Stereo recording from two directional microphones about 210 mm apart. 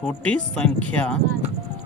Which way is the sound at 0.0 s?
5° left (ahead or behind).